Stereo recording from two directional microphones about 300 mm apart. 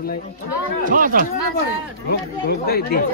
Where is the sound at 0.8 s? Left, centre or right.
Right.